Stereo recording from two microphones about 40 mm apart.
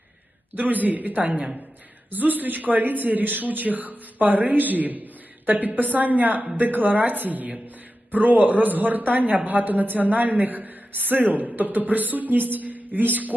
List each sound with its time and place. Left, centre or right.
0.5 s a woman's voice: right